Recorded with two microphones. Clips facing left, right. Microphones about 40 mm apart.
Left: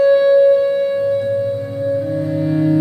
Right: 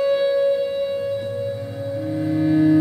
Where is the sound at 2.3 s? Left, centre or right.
Centre.